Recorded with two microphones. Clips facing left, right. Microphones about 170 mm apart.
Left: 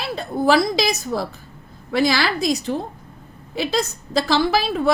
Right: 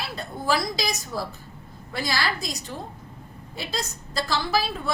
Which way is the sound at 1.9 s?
85° left.